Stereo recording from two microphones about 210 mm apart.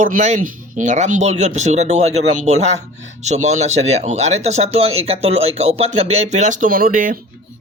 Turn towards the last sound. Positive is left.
turn(degrees=-40)  # may be behind; listen again after turning